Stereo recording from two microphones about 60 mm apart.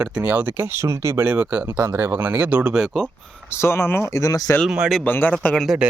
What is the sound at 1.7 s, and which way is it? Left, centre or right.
Speech, right.